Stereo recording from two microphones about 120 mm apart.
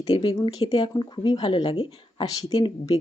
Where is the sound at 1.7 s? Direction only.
50° left (ahead or behind).